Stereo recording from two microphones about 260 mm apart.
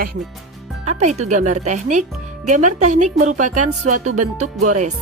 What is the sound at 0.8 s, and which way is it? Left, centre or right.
Speech, right.